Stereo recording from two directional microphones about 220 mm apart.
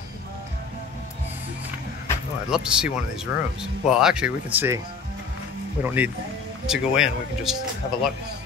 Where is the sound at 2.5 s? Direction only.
5° right (ahead or behind).